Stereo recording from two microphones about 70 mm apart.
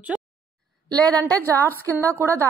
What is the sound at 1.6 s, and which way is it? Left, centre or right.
Speech, right.